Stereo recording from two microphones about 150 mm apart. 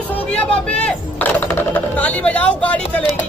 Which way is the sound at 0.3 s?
5° left (ahead or behind).